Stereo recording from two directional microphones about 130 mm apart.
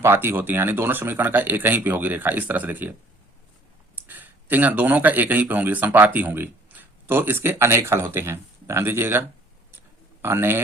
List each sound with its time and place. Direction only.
0.0 s speech: 20° right (ahead or behind)
3.9 s speech: 15° right (ahead or behind)
6.7 s a sound: 15° right (ahead or behind)
7.1 s a man's voice: 15° right (ahead or behind)